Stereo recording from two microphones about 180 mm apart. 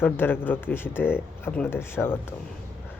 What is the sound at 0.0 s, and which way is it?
Speech, 10° left (ahead or behind).